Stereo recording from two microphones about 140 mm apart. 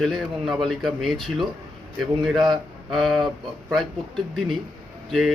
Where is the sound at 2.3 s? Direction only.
35° right (ahead or behind).